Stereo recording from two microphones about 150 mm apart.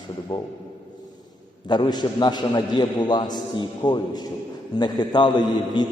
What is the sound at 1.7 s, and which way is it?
A man's voice, 30° left (ahead or behind).